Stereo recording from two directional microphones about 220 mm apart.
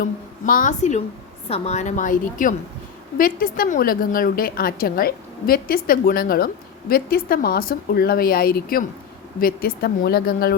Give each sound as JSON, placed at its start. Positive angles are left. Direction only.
{"t": 0.0, "sound": "a woman's voice", "side_deg": 40}